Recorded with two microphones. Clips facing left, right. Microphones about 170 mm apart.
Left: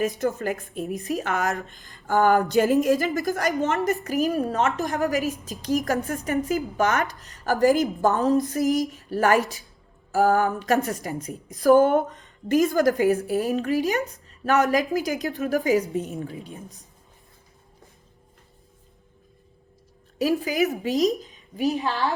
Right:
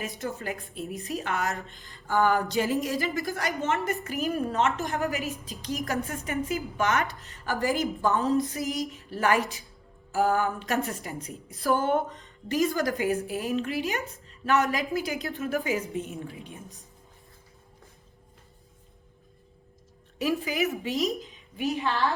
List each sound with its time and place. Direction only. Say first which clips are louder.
0.2 s a woman's voice: left 8 dB; 40° left (ahead or behind)
20.1 s a woman's voice: left 5 dB; 35° left (ahead or behind)